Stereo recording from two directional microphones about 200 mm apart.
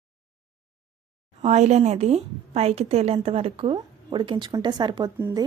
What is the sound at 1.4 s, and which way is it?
Speech, 35° right (ahead or behind).